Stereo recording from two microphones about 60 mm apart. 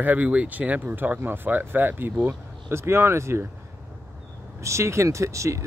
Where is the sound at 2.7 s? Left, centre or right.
Right.